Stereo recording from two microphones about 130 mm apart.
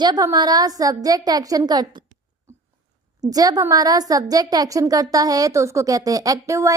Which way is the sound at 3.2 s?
30° right (ahead or behind).